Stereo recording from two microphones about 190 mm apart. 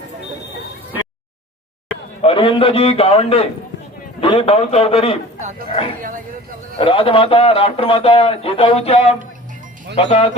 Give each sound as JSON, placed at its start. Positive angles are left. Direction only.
{"t": 2.2, "sound": "a man's voice", "side_deg": 25}
{"t": 5.4, "sound": "a sound", "side_deg": -40}
{"t": 6.7, "sound": "a man's voice", "side_deg": 30}